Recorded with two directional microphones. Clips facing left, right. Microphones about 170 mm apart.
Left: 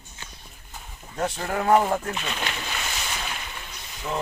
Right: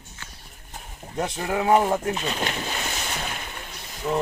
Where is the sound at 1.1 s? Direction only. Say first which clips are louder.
Right 1 dB; 15° right (ahead or behind).